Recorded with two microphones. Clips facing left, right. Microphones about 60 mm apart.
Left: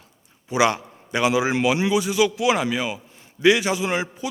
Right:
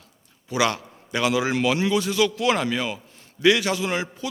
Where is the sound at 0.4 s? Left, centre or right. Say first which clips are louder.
Left 3 dB; left.